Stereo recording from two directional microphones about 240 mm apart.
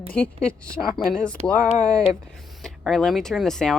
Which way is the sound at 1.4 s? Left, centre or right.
Right.